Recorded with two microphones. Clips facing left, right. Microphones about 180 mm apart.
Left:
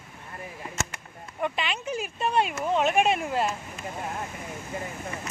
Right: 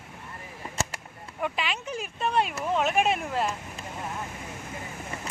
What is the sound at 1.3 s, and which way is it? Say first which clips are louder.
Speech: left 1 dB; 5° right (ahead or behind).